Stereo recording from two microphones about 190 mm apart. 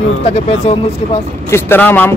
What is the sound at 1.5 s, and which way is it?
Speech, 10° left (ahead or behind).